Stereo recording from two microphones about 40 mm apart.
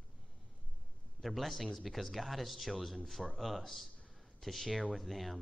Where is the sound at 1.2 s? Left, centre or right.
Centre.